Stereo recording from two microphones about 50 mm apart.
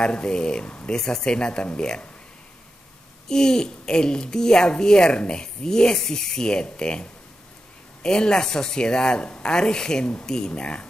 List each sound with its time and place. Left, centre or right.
0.0 s a woman's voice: centre
3.3 s a woman's voice: centre